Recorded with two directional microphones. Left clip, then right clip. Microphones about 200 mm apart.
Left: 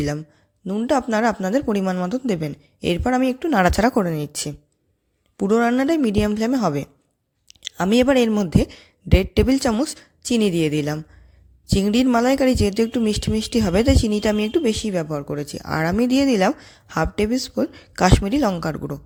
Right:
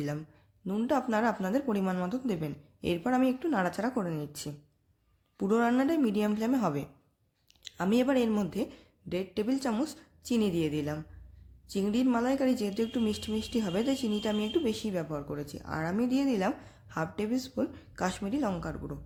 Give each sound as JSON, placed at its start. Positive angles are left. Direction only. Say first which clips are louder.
{"t": 0.0, "sound": "speech", "louder": "left 11 dB", "side_deg": 35}